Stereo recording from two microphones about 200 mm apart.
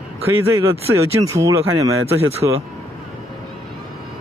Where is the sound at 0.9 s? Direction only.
15° right (ahead or behind).